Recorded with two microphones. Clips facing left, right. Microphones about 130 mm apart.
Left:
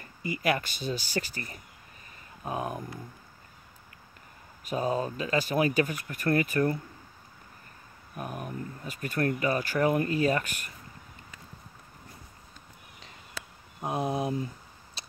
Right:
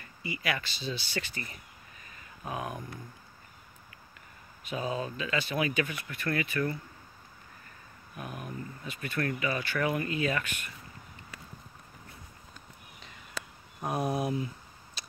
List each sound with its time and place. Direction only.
0.0 s speech: 45° left (ahead or behind)
4.6 s speech: 40° left (ahead or behind)
8.2 s speech: 45° left (ahead or behind)
13.7 s speech: 20° left (ahead or behind)
15.0 s a sound: 30° left (ahead or behind)